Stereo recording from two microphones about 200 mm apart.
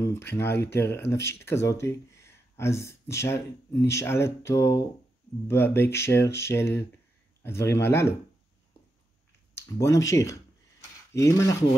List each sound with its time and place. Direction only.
0.0 s speech: 10° left (ahead or behind)
9.6 s speech: 15° left (ahead or behind)